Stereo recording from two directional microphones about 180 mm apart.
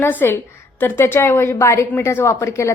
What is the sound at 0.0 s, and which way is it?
A woman's voice, 10° left (ahead or behind).